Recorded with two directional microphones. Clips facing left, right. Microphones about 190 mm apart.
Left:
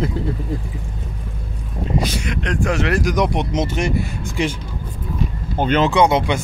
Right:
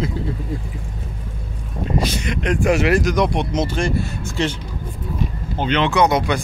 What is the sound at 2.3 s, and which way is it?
Speech, 5° right (ahead or behind).